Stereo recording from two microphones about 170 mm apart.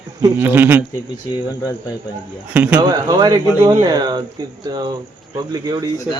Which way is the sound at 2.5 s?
10° right (ahead or behind).